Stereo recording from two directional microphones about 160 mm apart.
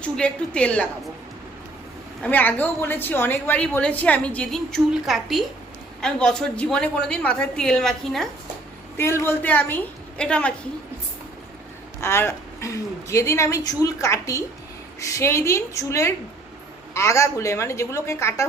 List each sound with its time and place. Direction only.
0.0 s a woman's voice: 5° left (ahead or behind)
2.2 s a woman's voice: 10° left (ahead or behind)
9.0 s a woman's voice: 15° left (ahead or behind)
11.9 s a woman's voice: 15° left (ahead or behind)